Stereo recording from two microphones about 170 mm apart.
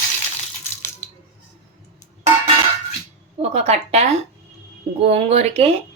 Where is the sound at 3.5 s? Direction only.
40° right (ahead or behind).